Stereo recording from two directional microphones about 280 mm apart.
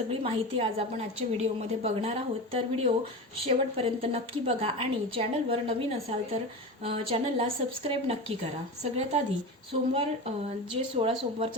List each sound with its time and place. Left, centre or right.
0.1 s a woman's voice: right